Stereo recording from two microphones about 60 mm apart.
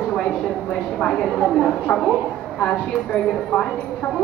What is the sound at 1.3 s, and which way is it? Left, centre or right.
Speech, centre.